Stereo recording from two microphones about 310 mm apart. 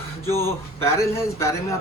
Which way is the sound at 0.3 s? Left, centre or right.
Centre.